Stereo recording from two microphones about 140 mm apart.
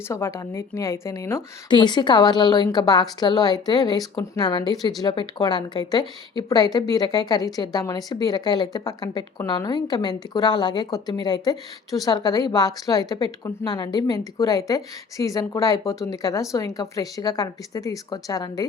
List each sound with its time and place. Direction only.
0.1 s a woman's voice: 20° left (ahead or behind)
1.7 s a woman's voice: 30° left (ahead or behind)